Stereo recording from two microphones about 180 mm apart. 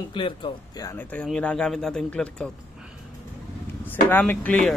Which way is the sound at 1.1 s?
5° left (ahead or behind).